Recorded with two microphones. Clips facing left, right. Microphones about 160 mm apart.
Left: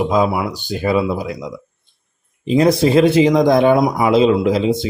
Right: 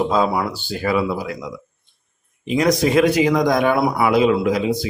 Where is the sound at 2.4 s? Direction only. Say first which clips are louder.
Left 4 dB; 30° left (ahead or behind).